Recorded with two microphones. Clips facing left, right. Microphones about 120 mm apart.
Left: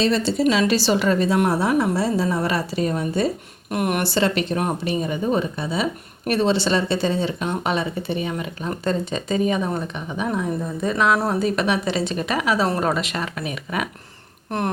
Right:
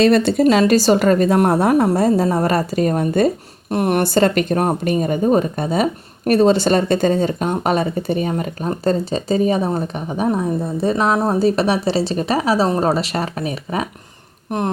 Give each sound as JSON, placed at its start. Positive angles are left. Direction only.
{"t": 0.0, "sound": "a woman's voice", "side_deg": -55}
{"t": 0.4, "sound": "a woman's voice", "side_deg": -40}
{"t": 3.7, "sound": "speech", "side_deg": -35}
{"t": 12.6, "sound": "a woman's voice", "side_deg": -20}
{"t": 12.9, "sound": "speech", "side_deg": -35}
{"t": 14.5, "sound": "a sound", "side_deg": -15}